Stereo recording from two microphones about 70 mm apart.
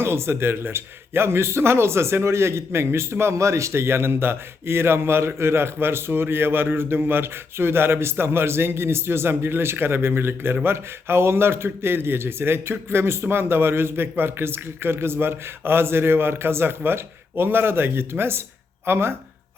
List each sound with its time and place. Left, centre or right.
0.0 s speech: right